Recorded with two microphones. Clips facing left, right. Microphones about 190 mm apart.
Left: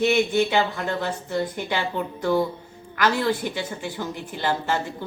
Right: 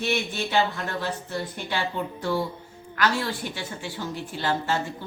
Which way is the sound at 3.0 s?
20° left (ahead or behind).